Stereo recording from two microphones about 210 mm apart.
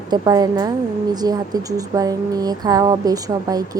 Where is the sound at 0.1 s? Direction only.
20° right (ahead or behind).